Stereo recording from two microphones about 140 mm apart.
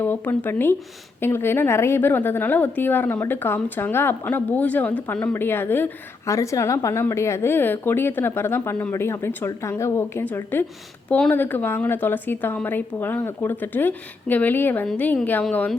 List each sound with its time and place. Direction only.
0.0 s a woman's voice: 15° left (ahead or behind)